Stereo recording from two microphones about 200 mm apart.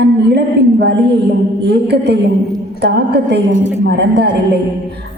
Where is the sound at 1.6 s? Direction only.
55° right (ahead or behind).